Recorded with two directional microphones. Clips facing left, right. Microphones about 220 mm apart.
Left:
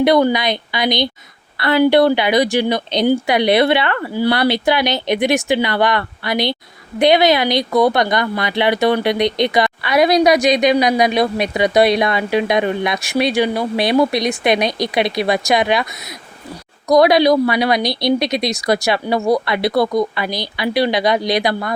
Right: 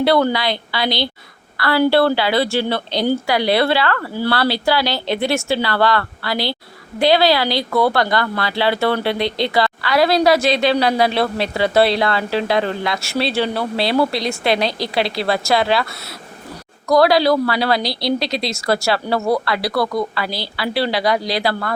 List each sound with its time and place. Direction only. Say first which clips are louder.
0.0 s a woman's voice: left 2 dB; 15° left (ahead or behind)